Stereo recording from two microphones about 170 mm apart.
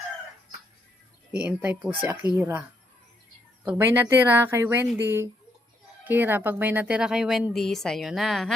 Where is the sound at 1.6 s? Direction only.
10° right (ahead or behind).